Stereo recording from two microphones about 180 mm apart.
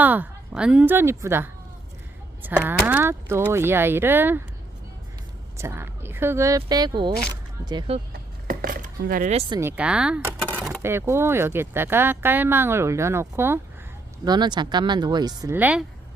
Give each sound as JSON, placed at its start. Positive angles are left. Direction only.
{"t": 0.0, "sound": "speech", "side_deg": -10}
{"t": 5.5, "sound": "speech", "side_deg": -15}
{"t": 8.4, "sound": "dishes", "side_deg": -50}
{"t": 9.6, "sound": "speech", "side_deg": -10}
{"t": 10.3, "sound": "a sound", "side_deg": 5}
{"t": 10.7, "sound": "speech", "side_deg": -15}
{"t": 14.3, "sound": "speech", "side_deg": -25}
{"t": 15.5, "sound": "speech", "side_deg": -10}